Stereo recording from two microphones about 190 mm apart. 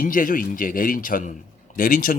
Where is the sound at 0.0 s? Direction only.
45° left (ahead or behind).